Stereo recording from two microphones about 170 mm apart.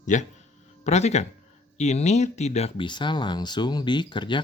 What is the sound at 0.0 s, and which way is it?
Speech, 45° left (ahead or behind).